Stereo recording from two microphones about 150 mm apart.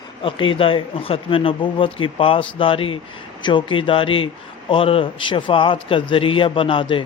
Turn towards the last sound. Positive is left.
turn(degrees=35)  # may be behind; listen again after turning